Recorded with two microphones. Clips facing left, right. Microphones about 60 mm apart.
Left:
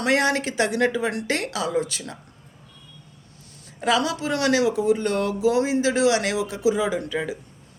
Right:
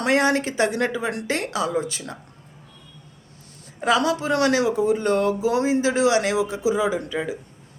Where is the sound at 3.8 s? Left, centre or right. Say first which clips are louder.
Right 2 dB; right.